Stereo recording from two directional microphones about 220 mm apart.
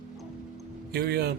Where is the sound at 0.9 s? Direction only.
45° right (ahead or behind).